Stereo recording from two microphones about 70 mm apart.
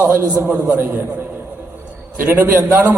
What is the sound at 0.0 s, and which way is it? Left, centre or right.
Speech, right.